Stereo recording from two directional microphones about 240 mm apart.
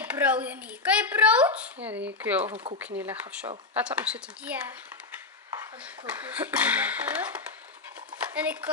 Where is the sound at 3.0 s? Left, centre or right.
Centre.